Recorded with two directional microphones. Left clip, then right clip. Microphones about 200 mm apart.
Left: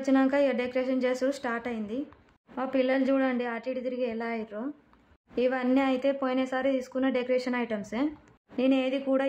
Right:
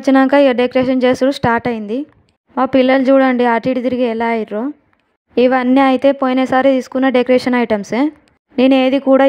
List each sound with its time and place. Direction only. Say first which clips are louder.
0.0 s speech: right 14 dB; 45° right (ahead or behind)